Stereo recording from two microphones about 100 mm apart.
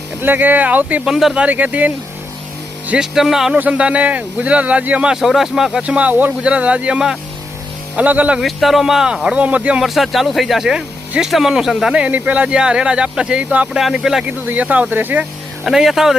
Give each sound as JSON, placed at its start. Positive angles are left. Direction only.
{"t": 0.2, "sound": "speech", "side_deg": -20}
{"t": 1.0, "sound": "speech", "side_deg": -5}
{"t": 3.2, "sound": "speech", "side_deg": -5}
{"t": 8.4, "sound": "speech", "side_deg": 0}
{"t": 9.8, "sound": "speech", "side_deg": 0}
{"t": 14.4, "sound": "speech", "side_deg": -15}
{"t": 15.6, "sound": "speech", "side_deg": -5}